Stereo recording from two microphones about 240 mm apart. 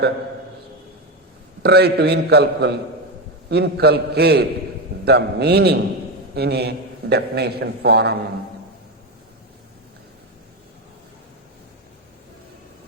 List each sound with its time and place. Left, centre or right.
1.6 s a man's voice: right